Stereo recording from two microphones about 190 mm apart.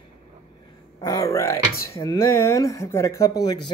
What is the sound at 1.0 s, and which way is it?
Speech, 20° left (ahead or behind).